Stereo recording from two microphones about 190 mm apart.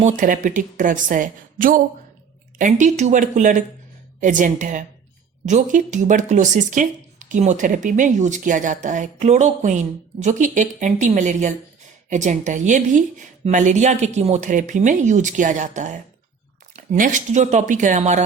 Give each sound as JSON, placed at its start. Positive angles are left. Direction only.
{"t": 0.0, "sound": "a woman's voice", "side_deg": -45}